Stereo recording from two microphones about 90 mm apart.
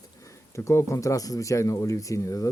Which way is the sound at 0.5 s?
30° left (ahead or behind).